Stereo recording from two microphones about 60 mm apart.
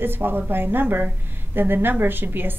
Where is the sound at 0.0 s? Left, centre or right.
Right.